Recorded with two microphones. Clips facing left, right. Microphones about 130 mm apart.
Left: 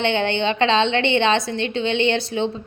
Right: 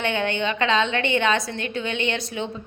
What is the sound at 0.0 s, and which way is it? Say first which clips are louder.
A woman's voice: left 4 dB; 30° left (ahead or behind).